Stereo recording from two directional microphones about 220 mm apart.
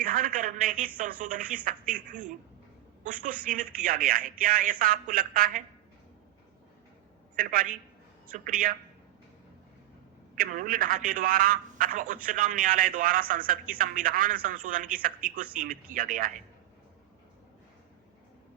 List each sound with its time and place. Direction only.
0.0 s telephone: 40° right (ahead or behind)
0.9 s speech: 40° right (ahead or behind)
7.3 s speech: 40° right (ahead or behind)
10.3 s speech: 40° right (ahead or behind)